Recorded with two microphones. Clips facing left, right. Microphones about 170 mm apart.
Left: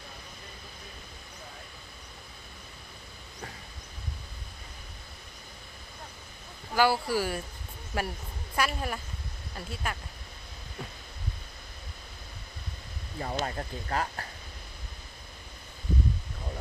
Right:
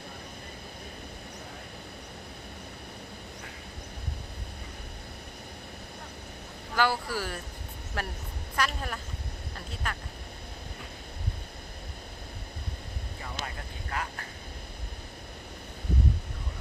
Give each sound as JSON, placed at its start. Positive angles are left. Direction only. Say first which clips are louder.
{"t": 6.7, "sound": "speech", "louder": "left 3 dB", "side_deg": 10}
{"t": 13.2, "sound": "speech", "louder": "left 8 dB", "side_deg": 40}